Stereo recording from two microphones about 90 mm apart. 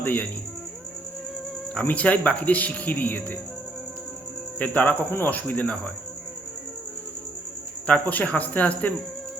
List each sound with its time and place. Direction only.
0.0 s speech: 20° left (ahead or behind)
1.7 s speech: 15° left (ahead or behind)
4.5 s speech: 15° left (ahead or behind)
7.9 s speech: 15° left (ahead or behind)